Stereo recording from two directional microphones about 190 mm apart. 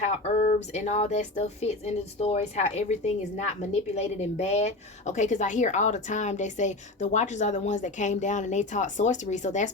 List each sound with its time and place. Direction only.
0.0 s speech: 40° left (ahead or behind)